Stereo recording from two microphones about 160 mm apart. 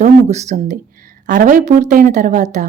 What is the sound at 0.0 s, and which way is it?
Speech, 45° right (ahead or behind).